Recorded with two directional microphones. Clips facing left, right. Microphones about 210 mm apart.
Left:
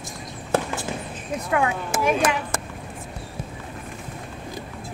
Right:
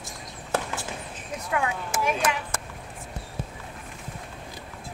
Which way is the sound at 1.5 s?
65° left (ahead or behind).